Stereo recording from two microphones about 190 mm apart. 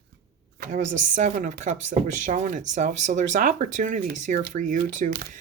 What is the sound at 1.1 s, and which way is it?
Speech, 45° right (ahead or behind).